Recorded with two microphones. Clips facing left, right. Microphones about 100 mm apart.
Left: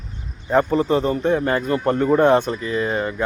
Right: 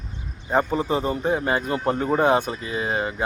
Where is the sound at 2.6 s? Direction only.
60° left (ahead or behind).